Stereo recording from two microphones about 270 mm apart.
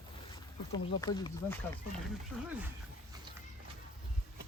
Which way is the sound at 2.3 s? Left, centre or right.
Centre.